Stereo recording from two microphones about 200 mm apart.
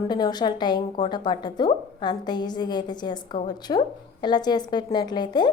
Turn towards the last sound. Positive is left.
turn(degrees=20)  # may be behind; listen again after turning